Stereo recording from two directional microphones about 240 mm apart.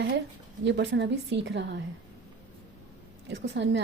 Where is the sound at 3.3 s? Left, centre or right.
Right.